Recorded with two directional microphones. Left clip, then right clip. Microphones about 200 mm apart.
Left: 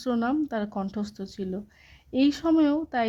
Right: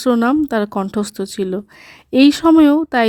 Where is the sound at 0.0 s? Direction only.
35° right (ahead or behind).